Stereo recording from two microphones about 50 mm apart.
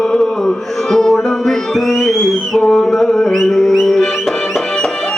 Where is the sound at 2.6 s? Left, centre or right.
Centre.